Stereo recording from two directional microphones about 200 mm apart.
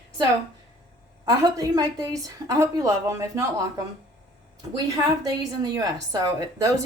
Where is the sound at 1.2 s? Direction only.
20° right (ahead or behind).